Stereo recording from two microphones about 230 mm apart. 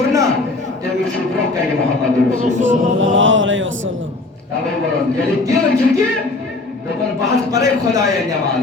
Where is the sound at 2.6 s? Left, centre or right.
Right.